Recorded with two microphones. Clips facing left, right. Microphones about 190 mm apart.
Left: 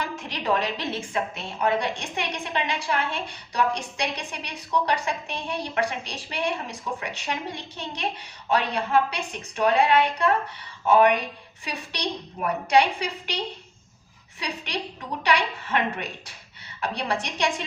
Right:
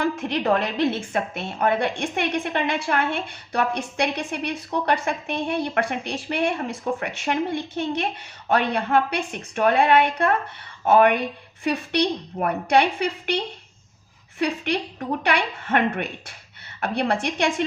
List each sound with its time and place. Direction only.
0.0 s a woman's voice: 55° right (ahead or behind)
11.6 s a woman's voice: 55° right (ahead or behind)